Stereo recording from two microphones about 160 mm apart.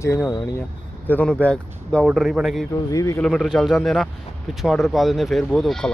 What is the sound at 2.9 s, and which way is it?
Speech, 20° left (ahead or behind).